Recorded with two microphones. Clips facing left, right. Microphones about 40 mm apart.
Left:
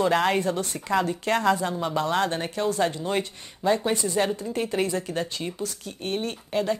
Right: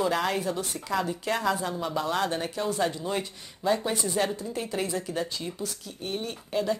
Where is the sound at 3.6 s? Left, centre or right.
Left.